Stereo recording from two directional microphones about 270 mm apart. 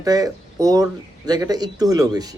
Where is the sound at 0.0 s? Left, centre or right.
Centre.